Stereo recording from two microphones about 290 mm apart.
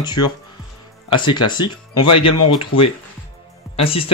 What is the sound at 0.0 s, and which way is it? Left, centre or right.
Speech, centre.